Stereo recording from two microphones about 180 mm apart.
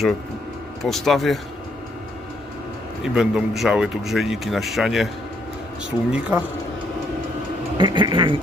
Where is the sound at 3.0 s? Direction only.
Centre (ahead or behind).